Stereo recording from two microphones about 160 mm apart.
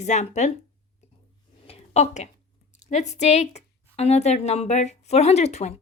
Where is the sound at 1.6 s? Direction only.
40° left (ahead or behind).